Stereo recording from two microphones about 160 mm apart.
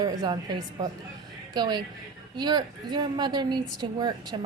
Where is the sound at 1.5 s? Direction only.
25° right (ahead or behind).